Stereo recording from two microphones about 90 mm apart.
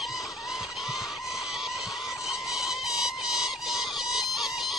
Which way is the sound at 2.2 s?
Centre (ahead or behind).